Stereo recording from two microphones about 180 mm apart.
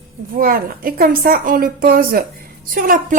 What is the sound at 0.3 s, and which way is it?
A woman's voice, 55° right (ahead or behind).